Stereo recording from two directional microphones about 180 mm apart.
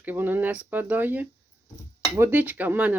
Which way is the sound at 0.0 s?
10° right (ahead or behind).